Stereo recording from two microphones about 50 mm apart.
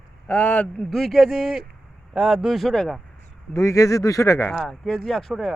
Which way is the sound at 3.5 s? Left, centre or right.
Left.